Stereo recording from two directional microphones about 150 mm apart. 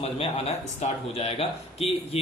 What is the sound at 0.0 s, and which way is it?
Speech, 40° left (ahead or behind).